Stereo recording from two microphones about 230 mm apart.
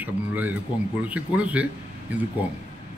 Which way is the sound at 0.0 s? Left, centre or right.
Centre.